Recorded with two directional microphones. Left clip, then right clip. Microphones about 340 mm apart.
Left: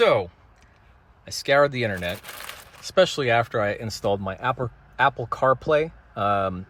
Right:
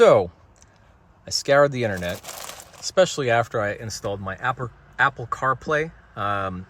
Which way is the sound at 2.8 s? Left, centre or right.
Centre.